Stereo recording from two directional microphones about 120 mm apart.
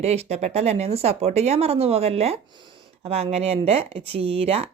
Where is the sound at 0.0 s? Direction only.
65° right (ahead or behind).